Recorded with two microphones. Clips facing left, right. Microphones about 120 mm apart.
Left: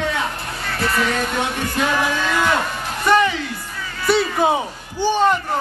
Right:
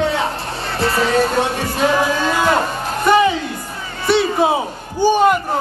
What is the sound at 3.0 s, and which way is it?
Music, 15° right (ahead or behind).